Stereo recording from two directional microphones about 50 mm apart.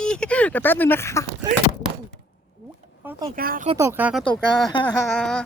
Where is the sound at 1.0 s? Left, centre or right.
Left.